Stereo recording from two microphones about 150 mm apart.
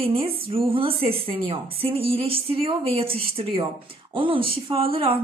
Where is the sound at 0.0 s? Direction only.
40° right (ahead or behind).